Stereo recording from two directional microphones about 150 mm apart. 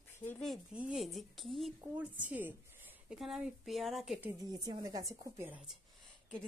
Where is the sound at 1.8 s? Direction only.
10° right (ahead or behind).